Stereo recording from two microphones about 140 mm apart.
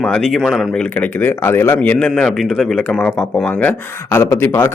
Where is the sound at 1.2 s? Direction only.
15° left (ahead or behind).